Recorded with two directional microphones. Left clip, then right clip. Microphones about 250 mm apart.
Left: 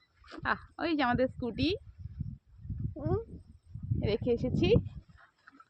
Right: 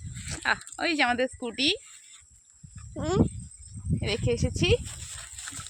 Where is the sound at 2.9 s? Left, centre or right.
Right.